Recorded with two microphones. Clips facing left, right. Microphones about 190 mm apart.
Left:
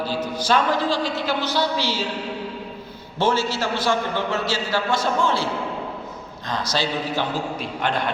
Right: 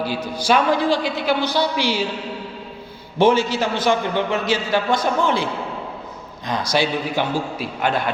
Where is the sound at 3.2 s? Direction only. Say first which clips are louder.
Right 5 dB; 15° right (ahead or behind).